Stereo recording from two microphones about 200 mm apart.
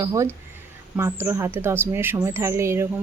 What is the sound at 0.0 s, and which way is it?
Speech, 15° right (ahead or behind).